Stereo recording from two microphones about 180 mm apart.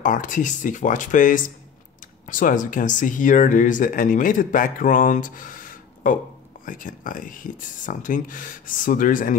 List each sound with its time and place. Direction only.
0.0 s speech: 45° left (ahead or behind)